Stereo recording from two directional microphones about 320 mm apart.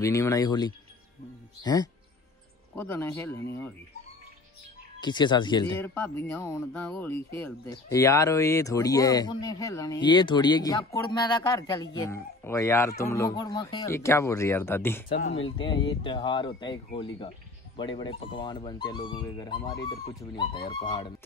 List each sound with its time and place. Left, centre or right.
0.0 s speech: centre
5.0 s speech: centre
15.1 s speech: left
15.6 s speech: centre